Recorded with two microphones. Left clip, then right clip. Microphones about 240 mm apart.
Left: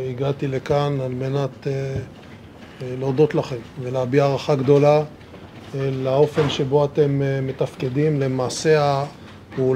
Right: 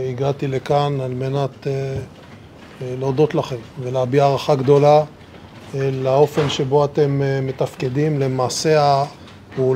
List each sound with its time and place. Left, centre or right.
0.0 s speech: right